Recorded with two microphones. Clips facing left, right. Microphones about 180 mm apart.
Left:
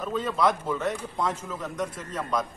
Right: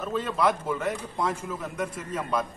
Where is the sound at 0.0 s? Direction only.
5° right (ahead or behind).